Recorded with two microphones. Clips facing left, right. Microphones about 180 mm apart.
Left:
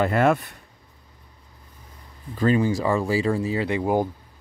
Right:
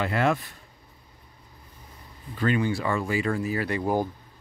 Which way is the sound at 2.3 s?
35° left (ahead or behind).